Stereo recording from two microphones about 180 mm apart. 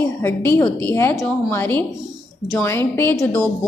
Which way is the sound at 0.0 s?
15° left (ahead or behind).